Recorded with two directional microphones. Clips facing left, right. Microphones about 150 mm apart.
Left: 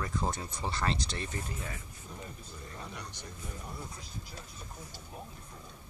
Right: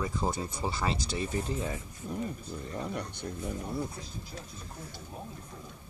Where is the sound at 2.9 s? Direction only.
60° right (ahead or behind).